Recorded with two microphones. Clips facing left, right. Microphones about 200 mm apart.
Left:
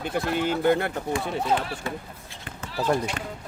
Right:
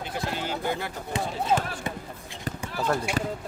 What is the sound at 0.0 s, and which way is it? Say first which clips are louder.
Speech: left 6 dB; 55° left (ahead or behind).